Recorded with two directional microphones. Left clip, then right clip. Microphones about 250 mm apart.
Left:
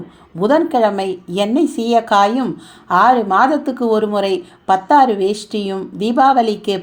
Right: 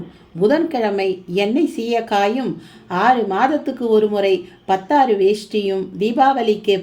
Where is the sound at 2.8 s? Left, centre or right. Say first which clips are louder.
Left 4 dB; centre.